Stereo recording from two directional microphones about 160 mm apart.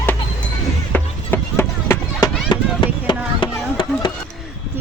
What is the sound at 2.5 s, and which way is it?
Chop, 30° left (ahead or behind).